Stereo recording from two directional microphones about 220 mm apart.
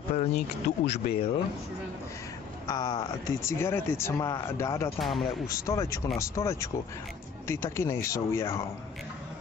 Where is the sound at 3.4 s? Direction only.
10° left (ahead or behind).